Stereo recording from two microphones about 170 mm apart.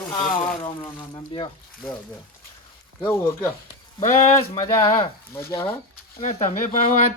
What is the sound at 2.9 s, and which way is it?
Speech, 15° left (ahead or behind).